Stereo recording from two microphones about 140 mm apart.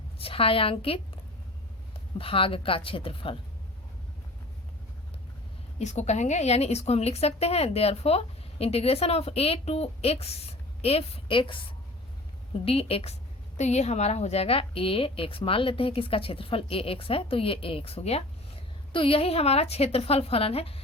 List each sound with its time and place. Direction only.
0.2 s a woman's voice: 40° left (ahead or behind)
5.8 s a woman's voice: 55° left (ahead or behind)
13.6 s a woman's voice: 55° left (ahead or behind)